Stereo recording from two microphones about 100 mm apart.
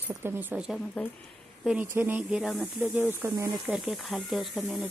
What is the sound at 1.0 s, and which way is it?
Speech, 10° left (ahead or behind).